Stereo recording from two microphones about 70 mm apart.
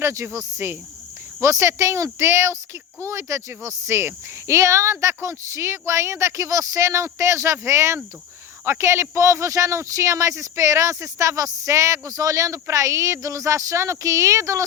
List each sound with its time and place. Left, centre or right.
0.0 s speech: right